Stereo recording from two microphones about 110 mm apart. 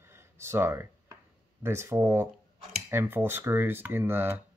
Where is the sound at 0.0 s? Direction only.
25° right (ahead or behind).